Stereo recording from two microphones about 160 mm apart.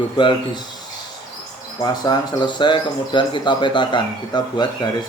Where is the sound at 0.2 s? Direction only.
30° left (ahead or behind).